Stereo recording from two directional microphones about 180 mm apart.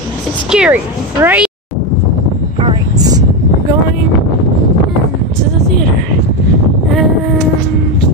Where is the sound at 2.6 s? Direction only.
20° right (ahead or behind).